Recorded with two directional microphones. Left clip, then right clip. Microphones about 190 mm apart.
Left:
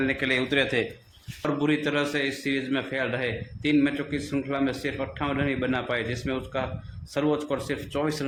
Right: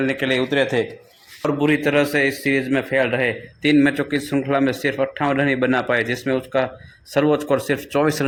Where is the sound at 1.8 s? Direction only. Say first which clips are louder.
Right 9 dB; 35° right (ahead or behind).